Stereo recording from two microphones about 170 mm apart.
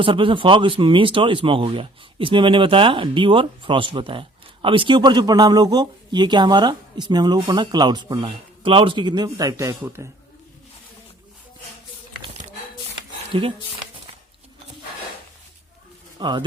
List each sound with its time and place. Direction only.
0.0 s speech: 30° right (ahead or behind)
13.3 s speech: 30° right (ahead or behind)
16.1 s speech: 25° right (ahead or behind)